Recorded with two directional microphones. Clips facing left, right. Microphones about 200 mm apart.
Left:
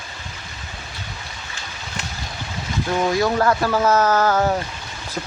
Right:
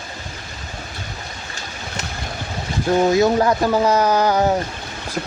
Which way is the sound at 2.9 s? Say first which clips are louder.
Right 5 dB; 25° right (ahead or behind).